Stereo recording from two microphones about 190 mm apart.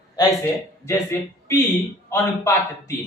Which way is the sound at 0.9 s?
10° left (ahead or behind).